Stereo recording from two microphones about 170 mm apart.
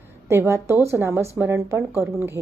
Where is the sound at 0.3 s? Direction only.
15° right (ahead or behind).